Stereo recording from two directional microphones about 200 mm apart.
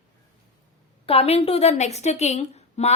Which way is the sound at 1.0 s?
30° left (ahead or behind).